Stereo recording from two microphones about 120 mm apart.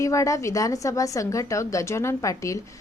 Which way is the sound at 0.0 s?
25° left (ahead or behind).